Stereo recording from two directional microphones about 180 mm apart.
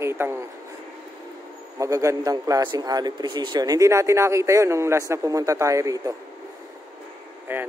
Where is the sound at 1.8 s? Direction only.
15° right (ahead or behind).